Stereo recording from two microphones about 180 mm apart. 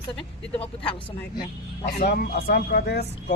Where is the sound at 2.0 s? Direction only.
60° left (ahead or behind).